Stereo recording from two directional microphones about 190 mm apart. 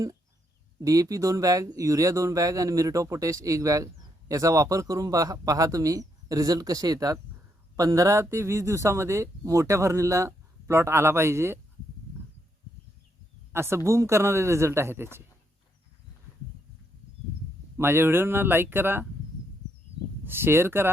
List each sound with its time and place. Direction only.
0.8 s speech: 20° right (ahead or behind)
13.5 s speech: 15° right (ahead or behind)
17.7 s speech: 10° right (ahead or behind)
20.2 s speech: 10° right (ahead or behind)